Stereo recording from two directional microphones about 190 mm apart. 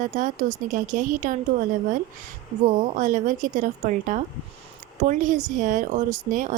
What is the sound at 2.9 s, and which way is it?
Speech, 40° right (ahead or behind).